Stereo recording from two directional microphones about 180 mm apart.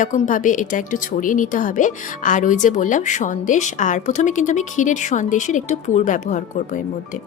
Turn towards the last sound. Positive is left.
turn(degrees=45)  # may be behind; listen again after turning